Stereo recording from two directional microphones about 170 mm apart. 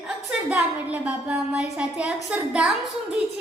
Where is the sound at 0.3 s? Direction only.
5° right (ahead or behind).